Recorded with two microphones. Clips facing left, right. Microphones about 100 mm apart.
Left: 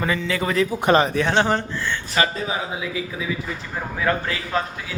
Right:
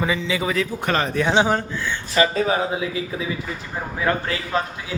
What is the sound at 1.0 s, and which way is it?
Speech, centre (ahead or behind).